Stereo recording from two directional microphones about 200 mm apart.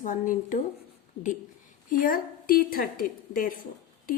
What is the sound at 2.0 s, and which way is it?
A woman's voice, 45° left (ahead or behind).